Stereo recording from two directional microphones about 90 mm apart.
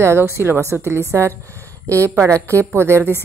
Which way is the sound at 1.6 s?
20° left (ahead or behind).